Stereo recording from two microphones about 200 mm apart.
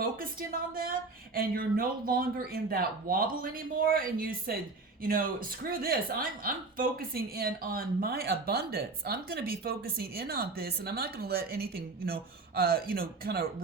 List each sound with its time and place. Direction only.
0.0 s a woman's voice: 45° right (ahead or behind)